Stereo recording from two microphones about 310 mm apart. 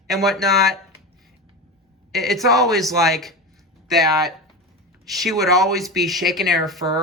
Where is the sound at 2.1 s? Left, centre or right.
Centre.